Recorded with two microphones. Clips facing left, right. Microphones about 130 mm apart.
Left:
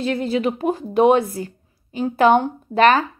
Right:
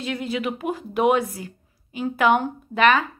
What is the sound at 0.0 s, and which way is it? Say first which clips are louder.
Speech: left 6 dB; 35° left (ahead or behind).